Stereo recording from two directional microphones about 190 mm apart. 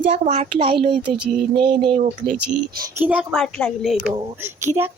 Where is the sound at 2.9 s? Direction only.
10° right (ahead or behind).